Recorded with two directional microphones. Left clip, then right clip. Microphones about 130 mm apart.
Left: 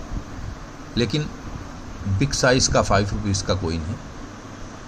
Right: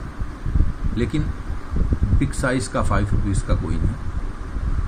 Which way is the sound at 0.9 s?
90° left.